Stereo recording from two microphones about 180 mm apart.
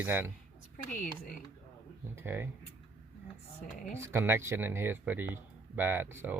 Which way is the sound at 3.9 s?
15° right (ahead or behind).